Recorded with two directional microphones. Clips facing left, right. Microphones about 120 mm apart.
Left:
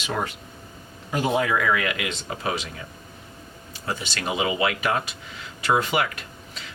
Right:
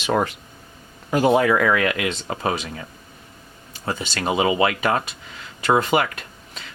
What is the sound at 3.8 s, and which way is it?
Speech, 45° right (ahead or behind).